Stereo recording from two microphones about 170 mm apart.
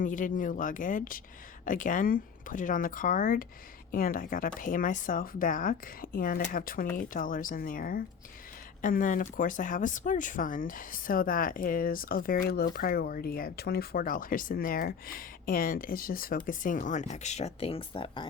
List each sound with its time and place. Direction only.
0.0 s speech: 50° left (ahead or behind); by 18.3 s 30° left (ahead or behind)